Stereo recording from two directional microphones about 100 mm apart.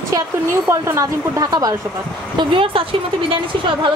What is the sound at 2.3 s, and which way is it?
Speech, 60° right (ahead or behind).